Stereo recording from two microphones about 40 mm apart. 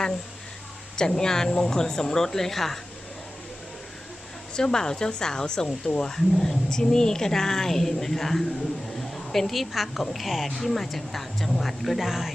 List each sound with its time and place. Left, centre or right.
0.9 s a woman's voice: centre
4.5 s a woman's voice: centre
6.1 s a woman's voice: centre